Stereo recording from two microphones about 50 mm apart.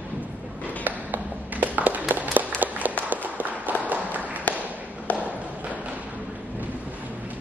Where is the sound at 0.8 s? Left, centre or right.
Right.